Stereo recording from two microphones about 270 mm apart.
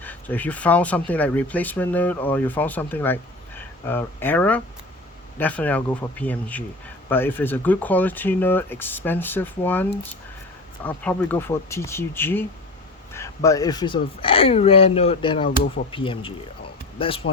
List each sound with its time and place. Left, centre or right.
0.0 s speech: centre
10.8 s speech: centre
15.4 s speech: left
15.9 s speech: centre